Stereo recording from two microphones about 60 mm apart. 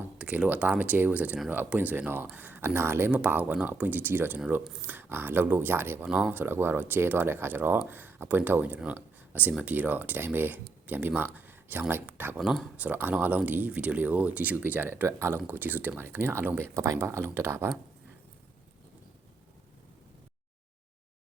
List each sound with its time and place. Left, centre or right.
0.2 s speech: right
3.1 s speech: right
15.0 s speech: right